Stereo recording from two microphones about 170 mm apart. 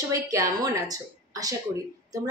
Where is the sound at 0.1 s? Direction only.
20° right (ahead or behind).